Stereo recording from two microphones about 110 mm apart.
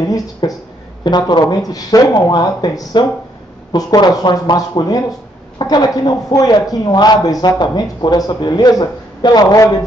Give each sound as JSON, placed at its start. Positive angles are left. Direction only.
{"t": 0.1, "sound": "a man's voice", "side_deg": 35}